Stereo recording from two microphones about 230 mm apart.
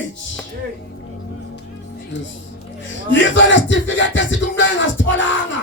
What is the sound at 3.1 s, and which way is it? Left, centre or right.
Music, left.